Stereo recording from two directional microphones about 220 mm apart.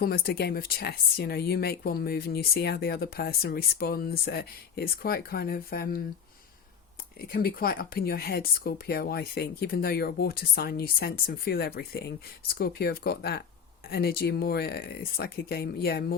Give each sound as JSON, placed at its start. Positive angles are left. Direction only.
{"t": 0.0, "sound": "speech", "side_deg": 45}
{"t": 7.2, "sound": "speech", "side_deg": 40}